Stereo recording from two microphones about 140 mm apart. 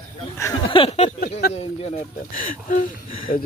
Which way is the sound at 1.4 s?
90° left.